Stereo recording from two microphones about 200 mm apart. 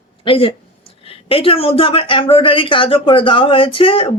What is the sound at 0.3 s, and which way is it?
Speech, 25° left (ahead or behind).